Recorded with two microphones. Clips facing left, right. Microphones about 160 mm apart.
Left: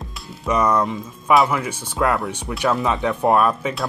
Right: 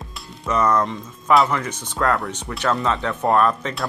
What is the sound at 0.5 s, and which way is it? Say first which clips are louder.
Speech: left 1 dB; 10° left (ahead or behind).